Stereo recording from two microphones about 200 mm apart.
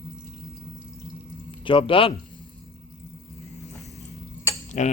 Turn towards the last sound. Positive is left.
turn(degrees=35)  # may be behind; listen again after turning